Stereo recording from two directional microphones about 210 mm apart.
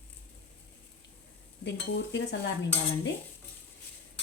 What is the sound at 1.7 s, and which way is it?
Speech, 55° left (ahead or behind).